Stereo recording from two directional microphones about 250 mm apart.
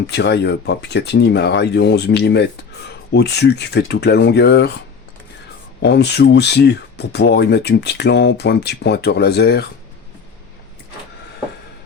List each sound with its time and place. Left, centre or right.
0.1 s speech: left
5.8 s speech: left